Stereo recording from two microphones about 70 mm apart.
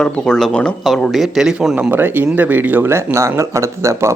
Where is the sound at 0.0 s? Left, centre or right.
Centre.